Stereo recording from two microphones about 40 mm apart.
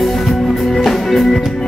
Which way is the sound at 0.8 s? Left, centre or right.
Centre.